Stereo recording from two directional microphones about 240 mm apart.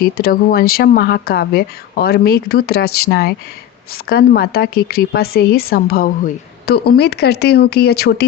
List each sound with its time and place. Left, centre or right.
0.0 s a woman's voice: left